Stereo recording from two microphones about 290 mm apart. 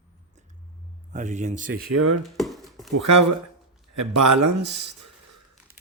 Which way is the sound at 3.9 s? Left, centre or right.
Right.